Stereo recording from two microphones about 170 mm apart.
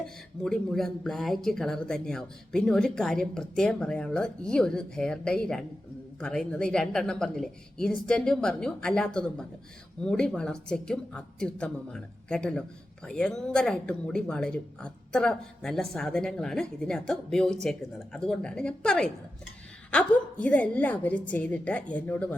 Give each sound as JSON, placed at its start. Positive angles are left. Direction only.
{"t": 0.0, "sound": "a woman's voice", "side_deg": 5}